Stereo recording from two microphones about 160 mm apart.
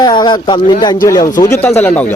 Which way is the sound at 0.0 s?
25° left (ahead or behind).